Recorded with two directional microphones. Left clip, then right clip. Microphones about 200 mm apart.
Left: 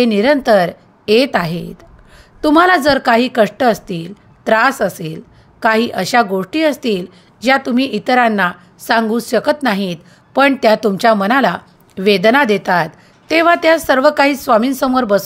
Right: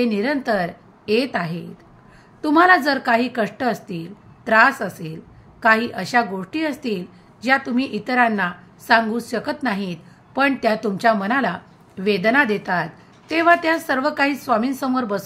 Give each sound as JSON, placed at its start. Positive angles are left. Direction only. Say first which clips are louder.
{"t": 0.0, "sound": "a woman's voice", "louder": "left 9 dB", "side_deg": 45}